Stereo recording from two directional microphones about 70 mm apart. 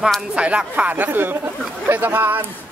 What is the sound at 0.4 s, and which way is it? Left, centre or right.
Speech, centre.